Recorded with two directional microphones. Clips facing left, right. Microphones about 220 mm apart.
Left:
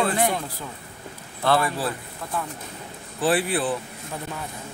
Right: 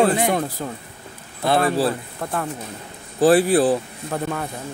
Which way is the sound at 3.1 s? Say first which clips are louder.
Right 8 dB; 40° right (ahead or behind).